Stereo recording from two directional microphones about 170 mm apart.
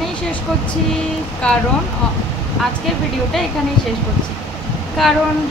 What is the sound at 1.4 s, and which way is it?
Speech, 5° left (ahead or behind).